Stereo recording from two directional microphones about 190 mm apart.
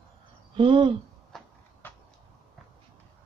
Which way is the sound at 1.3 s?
Centre (ahead or behind).